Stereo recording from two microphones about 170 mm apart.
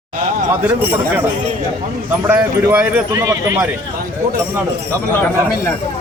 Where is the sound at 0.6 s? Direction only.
10° right (ahead or behind).